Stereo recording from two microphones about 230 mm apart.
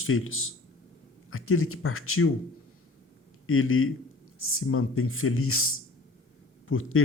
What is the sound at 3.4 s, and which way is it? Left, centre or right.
A man's voice, left.